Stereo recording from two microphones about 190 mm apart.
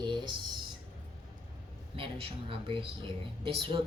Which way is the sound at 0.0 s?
25° right (ahead or behind).